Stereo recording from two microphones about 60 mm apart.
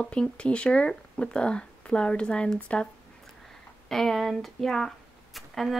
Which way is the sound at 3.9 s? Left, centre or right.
Centre.